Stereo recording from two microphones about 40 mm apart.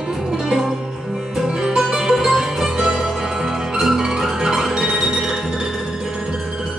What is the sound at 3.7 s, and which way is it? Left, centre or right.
Music, centre.